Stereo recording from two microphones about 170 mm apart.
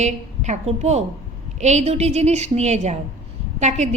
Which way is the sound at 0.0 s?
40° right (ahead or behind).